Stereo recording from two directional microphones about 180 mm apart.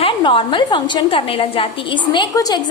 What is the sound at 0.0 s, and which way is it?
A woman's voice, 25° left (ahead or behind).